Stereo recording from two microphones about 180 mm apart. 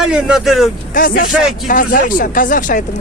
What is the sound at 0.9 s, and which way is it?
Speech, 50° left (ahead or behind).